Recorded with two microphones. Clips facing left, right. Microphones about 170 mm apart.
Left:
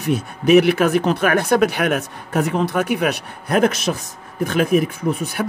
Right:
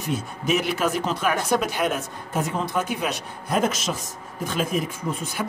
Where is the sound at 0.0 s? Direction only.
65° left (ahead or behind).